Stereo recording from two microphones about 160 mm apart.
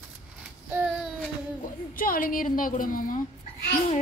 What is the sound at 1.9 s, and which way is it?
A woman's voice, 60° left (ahead or behind).